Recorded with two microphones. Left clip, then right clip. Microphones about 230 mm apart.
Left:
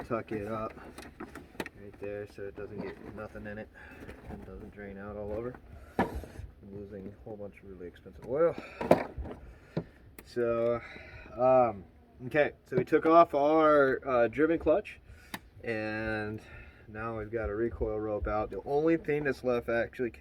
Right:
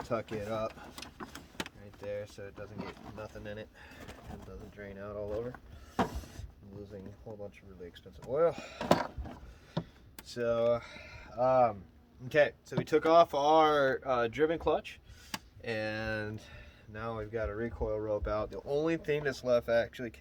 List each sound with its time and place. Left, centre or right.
0.1 s speech: right
2.4 s speech: right
8.3 s speech: right
8.9 s a sound: centre
10.3 s speech: right